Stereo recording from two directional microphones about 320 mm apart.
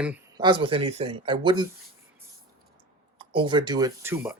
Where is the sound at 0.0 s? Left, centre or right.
Centre.